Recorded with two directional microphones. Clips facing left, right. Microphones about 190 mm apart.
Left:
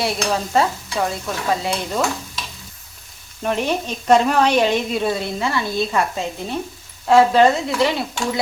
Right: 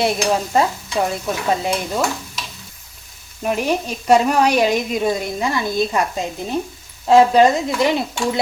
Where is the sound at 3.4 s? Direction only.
10° right (ahead or behind).